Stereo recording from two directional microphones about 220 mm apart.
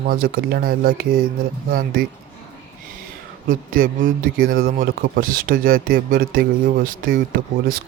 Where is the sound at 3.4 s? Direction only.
40° right (ahead or behind).